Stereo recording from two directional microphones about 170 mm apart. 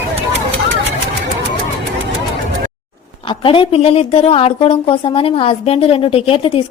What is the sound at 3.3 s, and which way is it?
A woman's voice, 30° left (ahead or behind).